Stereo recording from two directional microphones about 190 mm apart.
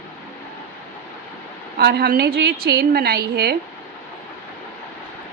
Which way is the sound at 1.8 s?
55° right (ahead or behind).